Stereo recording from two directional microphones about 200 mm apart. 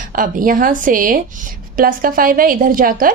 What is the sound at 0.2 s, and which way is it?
A woman's voice, 45° right (ahead or behind).